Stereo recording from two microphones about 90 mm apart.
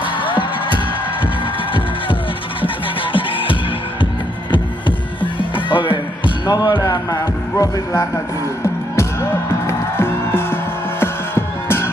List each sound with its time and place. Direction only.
0.0 s music: 70° left (ahead or behind)
2.6 s music: 75° left (ahead or behind); by 11.9 s 25° left (ahead or behind)